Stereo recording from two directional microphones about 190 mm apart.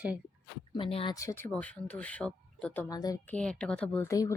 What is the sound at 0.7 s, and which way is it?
Speech, 25° left (ahead or behind).